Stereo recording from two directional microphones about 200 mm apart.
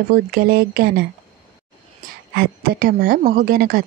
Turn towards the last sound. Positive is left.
turn(degrees=-45)  # may be behind; listen again after turning